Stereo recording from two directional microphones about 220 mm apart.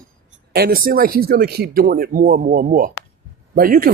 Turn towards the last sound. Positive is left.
turn(degrees=-40)  # may be behind; listen again after turning